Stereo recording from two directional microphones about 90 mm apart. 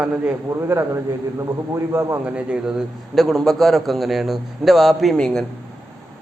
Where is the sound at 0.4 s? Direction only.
30° right (ahead or behind).